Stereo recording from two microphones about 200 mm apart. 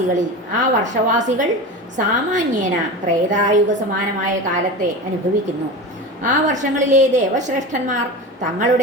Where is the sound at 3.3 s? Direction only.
40° right (ahead or behind).